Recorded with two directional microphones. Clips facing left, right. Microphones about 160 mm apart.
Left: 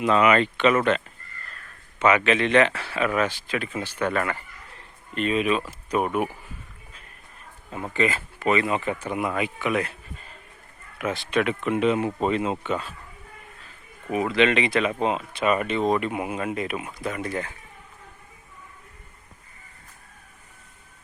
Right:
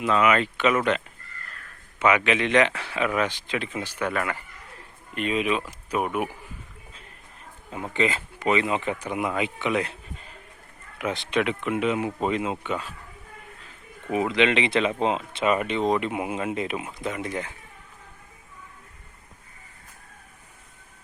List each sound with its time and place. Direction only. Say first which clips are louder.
0.0 s speech: left 2 dB; centre (ahead or behind)
7.9 s speech: left 1 dB; 20° right (ahead or behind)
11.6 s speech: left 3 dB; 10° right (ahead or behind)
14.1 s speech: left 1 dB; 20° right (ahead or behind)